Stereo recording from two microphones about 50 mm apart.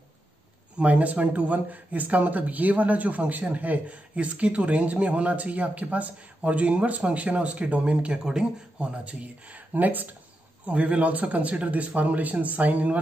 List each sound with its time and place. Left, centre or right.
0.7 s speech: right